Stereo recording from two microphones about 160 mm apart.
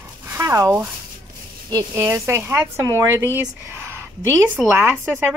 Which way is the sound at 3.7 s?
15° right (ahead or behind).